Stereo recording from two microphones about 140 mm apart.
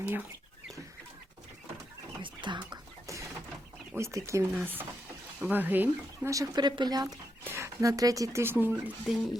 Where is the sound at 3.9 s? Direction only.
20° right (ahead or behind).